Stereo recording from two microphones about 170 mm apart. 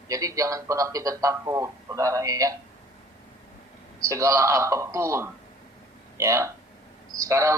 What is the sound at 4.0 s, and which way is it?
A man's voice, 20° right (ahead or behind).